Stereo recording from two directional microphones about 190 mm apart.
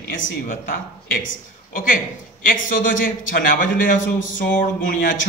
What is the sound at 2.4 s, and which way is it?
A man's voice, 45° left (ahead or behind).